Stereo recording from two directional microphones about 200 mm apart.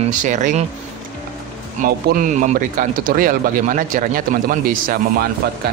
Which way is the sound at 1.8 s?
45° right (ahead or behind).